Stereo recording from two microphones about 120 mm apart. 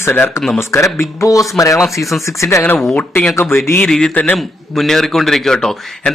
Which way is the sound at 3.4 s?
20° left (ahead or behind).